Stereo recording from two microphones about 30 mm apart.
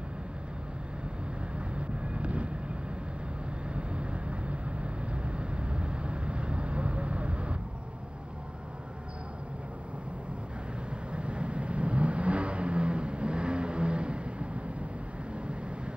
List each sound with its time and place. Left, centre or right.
1.8 s vehicle: right
3.6 s vehicle: right
11.1 s vehicle: right